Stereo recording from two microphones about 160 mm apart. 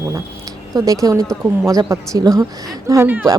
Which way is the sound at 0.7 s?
20° right (ahead or behind).